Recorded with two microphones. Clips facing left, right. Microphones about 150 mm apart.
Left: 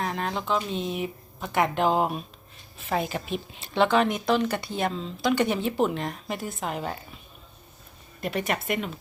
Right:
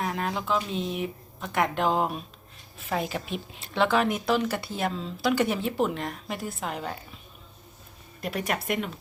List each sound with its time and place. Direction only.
0.0 s a woman's voice: 5° right (ahead or behind)
8.2 s a woman's voice: centre (ahead or behind)